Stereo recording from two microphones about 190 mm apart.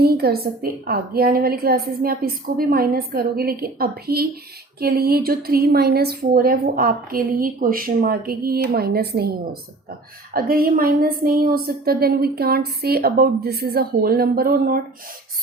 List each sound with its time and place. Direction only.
0.0 s a woman's voice: 55° right (ahead or behind)